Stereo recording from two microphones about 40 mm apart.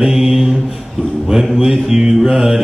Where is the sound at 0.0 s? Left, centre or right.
Centre.